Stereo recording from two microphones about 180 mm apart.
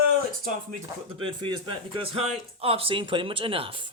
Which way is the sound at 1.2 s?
25° right (ahead or behind).